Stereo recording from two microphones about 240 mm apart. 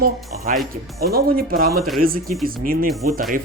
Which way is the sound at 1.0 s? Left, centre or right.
Right.